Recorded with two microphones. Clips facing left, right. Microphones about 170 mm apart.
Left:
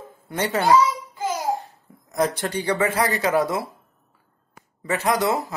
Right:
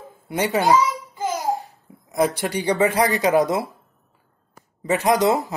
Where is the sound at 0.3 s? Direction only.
15° right (ahead or behind).